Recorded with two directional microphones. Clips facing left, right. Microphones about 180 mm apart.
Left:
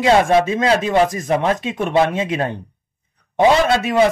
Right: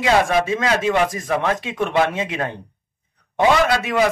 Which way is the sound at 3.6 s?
25° left (ahead or behind).